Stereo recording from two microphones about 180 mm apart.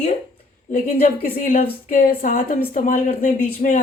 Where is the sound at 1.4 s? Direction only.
50° left (ahead or behind).